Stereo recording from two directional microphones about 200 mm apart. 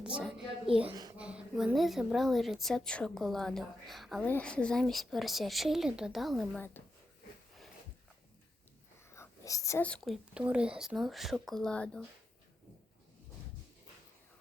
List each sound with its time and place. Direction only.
0.0 s a sound: 5° right (ahead or behind)
0.9 s speech: 20° right (ahead or behind)
1.1 s a woman's voice: 5° right (ahead or behind)
9.0 s a woman's voice: 15° left (ahead or behind)